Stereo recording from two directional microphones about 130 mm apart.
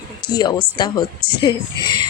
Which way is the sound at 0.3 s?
35° left (ahead or behind).